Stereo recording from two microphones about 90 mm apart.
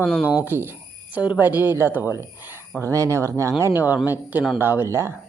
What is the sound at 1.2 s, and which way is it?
Speech, 15° right (ahead or behind).